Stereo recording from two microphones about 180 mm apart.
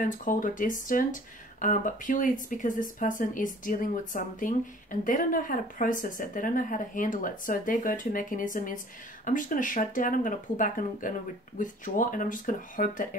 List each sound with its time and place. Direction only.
0.0 s speech: 45° left (ahead or behind)